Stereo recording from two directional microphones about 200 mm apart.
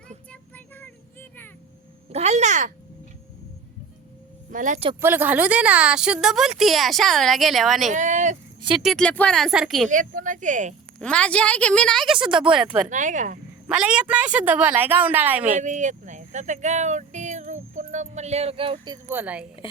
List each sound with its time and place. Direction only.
0.3 s child singing: 10° left (ahead or behind)
2.1 s speech: 35° right (ahead or behind)
4.5 s speech: 40° right (ahead or behind)
4.9 s a woman's voice: 10° right (ahead or behind)
7.9 s speech: 40° right (ahead or behind)
8.8 s a woman's voice: centre (ahead or behind)
9.9 s speech: 40° right (ahead or behind)
11.0 s a woman's voice: 5° left (ahead or behind)
12.9 s speech: 40° right (ahead or behind)
13.7 s a woman's voice: 5° right (ahead or behind)
15.4 s speech: 40° right (ahead or behind)
19.0 s a woman's voice: 10° right (ahead or behind)